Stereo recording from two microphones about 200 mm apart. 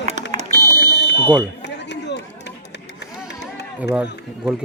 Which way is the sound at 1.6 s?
60° left (ahead or behind).